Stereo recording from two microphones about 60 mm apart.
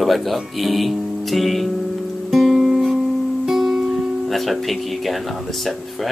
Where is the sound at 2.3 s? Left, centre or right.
Centre.